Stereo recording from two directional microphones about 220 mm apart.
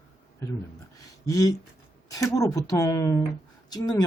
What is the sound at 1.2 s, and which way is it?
Speech, 15° left (ahead or behind).